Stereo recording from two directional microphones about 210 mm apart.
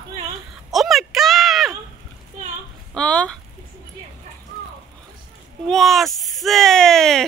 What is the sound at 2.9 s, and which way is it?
Chicken, 5° left (ahead or behind).